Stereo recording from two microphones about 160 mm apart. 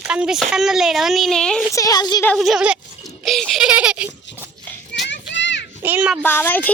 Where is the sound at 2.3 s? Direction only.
Centre (ahead or behind).